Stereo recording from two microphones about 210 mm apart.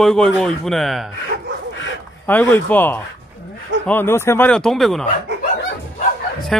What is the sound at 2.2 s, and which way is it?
Speech, 10° left (ahead or behind).